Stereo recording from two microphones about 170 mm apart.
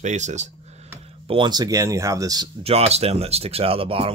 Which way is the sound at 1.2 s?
30° right (ahead or behind).